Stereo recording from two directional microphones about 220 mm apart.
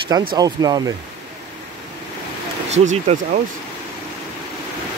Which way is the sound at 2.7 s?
30° right (ahead or behind).